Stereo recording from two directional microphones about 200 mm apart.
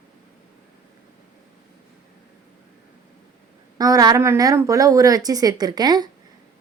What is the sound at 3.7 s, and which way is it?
Speech, 20° right (ahead or behind).